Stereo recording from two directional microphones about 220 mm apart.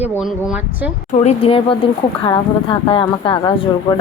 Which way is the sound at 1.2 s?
25° left (ahead or behind).